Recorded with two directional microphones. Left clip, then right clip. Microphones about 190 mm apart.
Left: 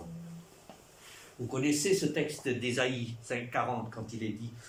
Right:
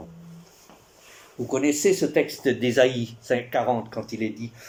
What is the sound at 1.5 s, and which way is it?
Speech, 30° right (ahead or behind).